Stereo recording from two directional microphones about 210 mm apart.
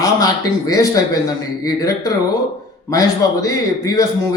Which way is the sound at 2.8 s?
15° left (ahead or behind).